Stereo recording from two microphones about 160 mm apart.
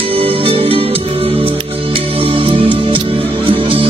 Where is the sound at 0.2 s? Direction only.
35° right (ahead or behind).